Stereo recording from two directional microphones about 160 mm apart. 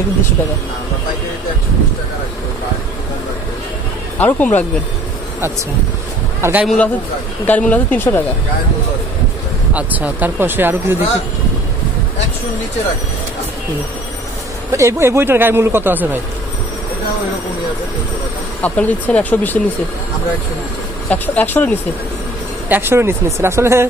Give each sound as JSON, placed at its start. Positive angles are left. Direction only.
{"t": 4.2, "sound": "speech", "side_deg": 10}
{"t": 6.4, "sound": "a man's voice", "side_deg": -10}
{"t": 7.4, "sound": "speech", "side_deg": 10}
{"t": 9.8, "sound": "a man's voice", "side_deg": -10}
{"t": 14.7, "sound": "a man's voice", "side_deg": -20}
{"t": 18.6, "sound": "speech", "side_deg": 10}
{"t": 21.1, "sound": "speech", "side_deg": 10}
{"t": 22.7, "sound": "a man's voice", "side_deg": -15}